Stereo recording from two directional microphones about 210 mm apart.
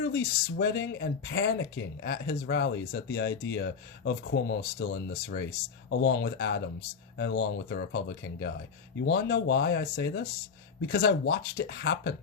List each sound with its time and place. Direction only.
0.0 s speech: 50° left (ahead or behind)